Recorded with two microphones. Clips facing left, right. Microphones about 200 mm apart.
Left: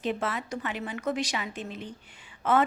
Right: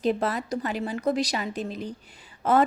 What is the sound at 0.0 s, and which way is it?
A woman's voice, 40° right (ahead or behind).